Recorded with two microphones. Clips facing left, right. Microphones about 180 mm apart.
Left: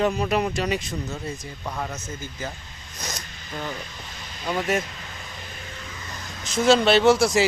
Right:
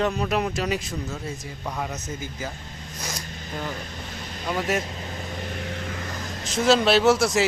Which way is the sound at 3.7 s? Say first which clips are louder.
Right 1 dB; 50° right (ahead or behind).